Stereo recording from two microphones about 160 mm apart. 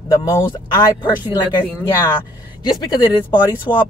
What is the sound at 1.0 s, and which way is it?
Speech, 30° left (ahead or behind).